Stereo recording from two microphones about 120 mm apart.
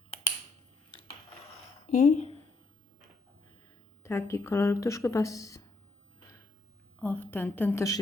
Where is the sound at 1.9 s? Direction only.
75° left (ahead or behind).